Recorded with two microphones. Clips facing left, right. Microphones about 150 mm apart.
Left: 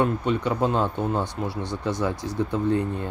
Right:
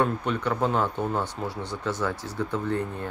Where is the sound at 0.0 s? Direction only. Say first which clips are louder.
Left 2 dB; 15° left (ahead or behind).